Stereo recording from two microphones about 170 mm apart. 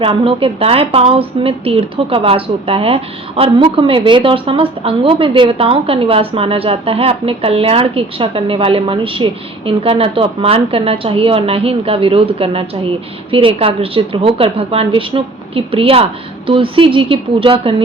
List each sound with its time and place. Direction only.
0.0 s speech: 30° right (ahead or behind)